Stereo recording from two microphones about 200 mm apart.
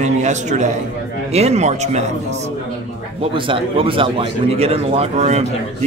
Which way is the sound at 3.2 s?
25° right (ahead or behind).